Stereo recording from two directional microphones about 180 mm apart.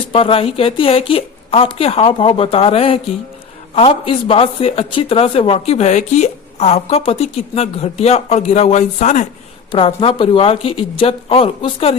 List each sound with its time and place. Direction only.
0.1 s speech: 30° left (ahead or behind)